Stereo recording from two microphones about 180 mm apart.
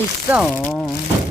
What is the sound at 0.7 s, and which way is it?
Speech, 5° left (ahead or behind).